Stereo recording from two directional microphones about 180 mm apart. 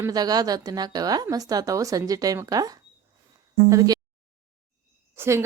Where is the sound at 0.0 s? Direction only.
20° right (ahead or behind).